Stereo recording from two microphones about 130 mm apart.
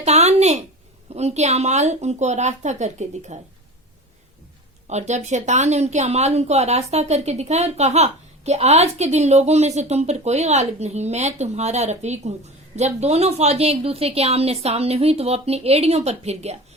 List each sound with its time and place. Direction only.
0.0 s a sound: 55° right (ahead or behind)
1.1 s speech: 55° right (ahead or behind)
4.9 s a woman's voice: 60° right (ahead or behind)